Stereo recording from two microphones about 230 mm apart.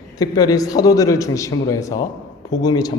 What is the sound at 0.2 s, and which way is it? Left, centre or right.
A man's voice, centre.